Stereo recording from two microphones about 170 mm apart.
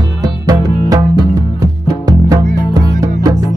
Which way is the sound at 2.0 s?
20° right (ahead or behind).